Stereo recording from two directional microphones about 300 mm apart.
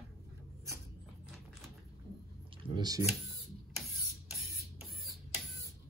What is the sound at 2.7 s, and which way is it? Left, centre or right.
Speech, centre.